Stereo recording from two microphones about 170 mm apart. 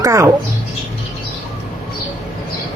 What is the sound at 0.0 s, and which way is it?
Speech, 20° right (ahead or behind).